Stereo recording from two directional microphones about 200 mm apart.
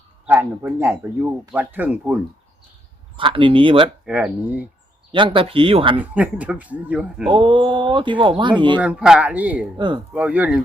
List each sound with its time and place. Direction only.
0.3 s speech: 10° right (ahead or behind)
3.2 s speech: 25° right (ahead or behind)
4.0 s speech: 5° right (ahead or behind)
5.1 s speech: 25° right (ahead or behind)
6.0 s speech: 5° right (ahead or behind)
7.3 s speech: 25° right (ahead or behind)
8.8 s speech: 5° right (ahead or behind)
9.7 s speech: 25° right (ahead or behind)
10.2 s speech: 5° right (ahead or behind)